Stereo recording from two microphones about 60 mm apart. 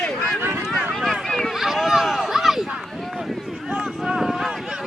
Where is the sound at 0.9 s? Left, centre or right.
Centre.